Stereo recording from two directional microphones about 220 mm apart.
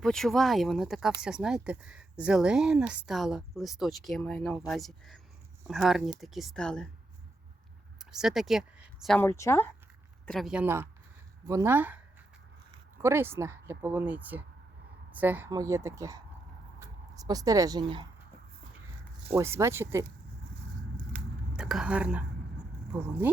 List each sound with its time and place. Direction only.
0.0 s speech: centre (ahead or behind)
7.9 s speech: centre (ahead or behind)
10.2 s a woman's voice: centre (ahead or behind)
13.0 s a woman's voice: 10° right (ahead or behind)
19.3 s a woman's voice: 10° right (ahead or behind)
21.5 s speech: 5° right (ahead or behind)